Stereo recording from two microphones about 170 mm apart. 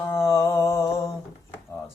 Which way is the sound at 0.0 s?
15° left (ahead or behind).